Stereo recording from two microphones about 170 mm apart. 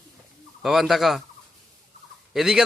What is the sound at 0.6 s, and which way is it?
Speech, centre (ahead or behind).